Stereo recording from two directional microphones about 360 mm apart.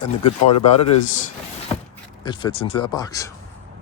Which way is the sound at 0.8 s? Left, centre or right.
Left.